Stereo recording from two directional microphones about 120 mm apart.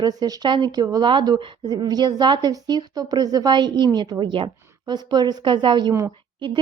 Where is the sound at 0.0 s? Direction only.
35° right (ahead or behind).